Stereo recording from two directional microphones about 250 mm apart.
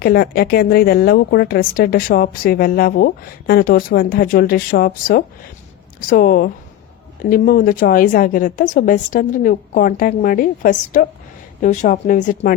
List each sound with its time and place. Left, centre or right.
0.0 s a woman's voice: left